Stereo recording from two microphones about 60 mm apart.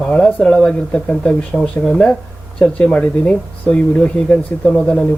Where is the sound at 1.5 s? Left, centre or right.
Centre.